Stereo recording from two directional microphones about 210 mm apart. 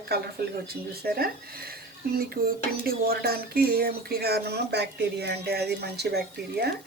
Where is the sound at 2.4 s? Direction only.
45° right (ahead or behind).